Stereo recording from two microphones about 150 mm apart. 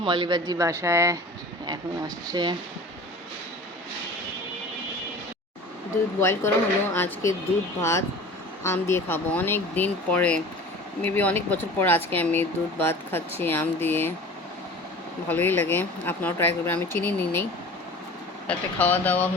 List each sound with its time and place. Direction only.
0.0 s speech: 30° right (ahead or behind)
6.1 s speech: 15° left (ahead or behind)
15.3 s speech: 15° left (ahead or behind)
18.4 s speech: 10° left (ahead or behind)